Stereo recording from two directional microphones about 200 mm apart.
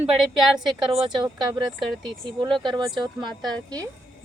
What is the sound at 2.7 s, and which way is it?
Speech, 20° right (ahead or behind).